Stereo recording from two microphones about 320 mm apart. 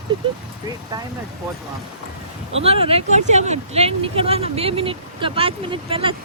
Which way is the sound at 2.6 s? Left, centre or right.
Centre.